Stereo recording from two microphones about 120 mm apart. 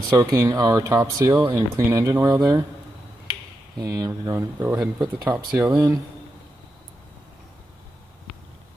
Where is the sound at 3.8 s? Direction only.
30° right (ahead or behind).